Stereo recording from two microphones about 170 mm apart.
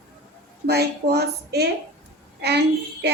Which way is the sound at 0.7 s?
70° right (ahead or behind).